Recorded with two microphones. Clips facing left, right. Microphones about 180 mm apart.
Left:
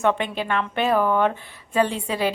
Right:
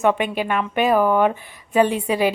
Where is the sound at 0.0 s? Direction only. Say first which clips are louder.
Right 3 dB; 10° right (ahead or behind).